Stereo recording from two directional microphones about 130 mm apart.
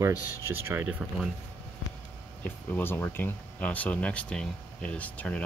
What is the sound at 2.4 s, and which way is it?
Speech, 15° left (ahead or behind).